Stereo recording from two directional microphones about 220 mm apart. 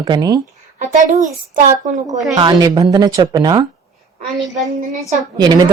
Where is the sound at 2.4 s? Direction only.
20° right (ahead or behind).